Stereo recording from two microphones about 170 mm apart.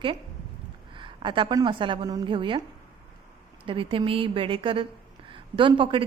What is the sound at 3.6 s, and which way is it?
A woman's voice, 30° right (ahead or behind).